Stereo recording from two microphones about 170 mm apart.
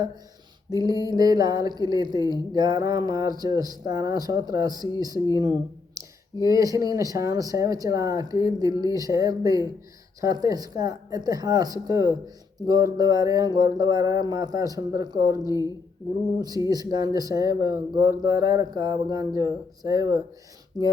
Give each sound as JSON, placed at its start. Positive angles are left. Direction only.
{"t": 0.7, "sound": "speech", "side_deg": -25}
{"t": 5.3, "sound": "a sound", "side_deg": -25}
{"t": 6.4, "sound": "speech", "side_deg": -20}
{"t": 15.4, "sound": "a woman's voice", "side_deg": 20}
{"t": 16.6, "sound": "speech", "side_deg": -20}